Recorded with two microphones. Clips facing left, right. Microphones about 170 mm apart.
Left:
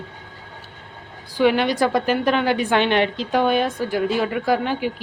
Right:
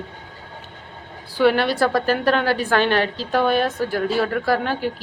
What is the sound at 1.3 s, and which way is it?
A woman's voice, 15° left (ahead or behind).